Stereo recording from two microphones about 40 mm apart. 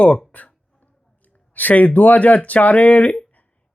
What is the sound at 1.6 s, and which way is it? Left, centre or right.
Speech, left.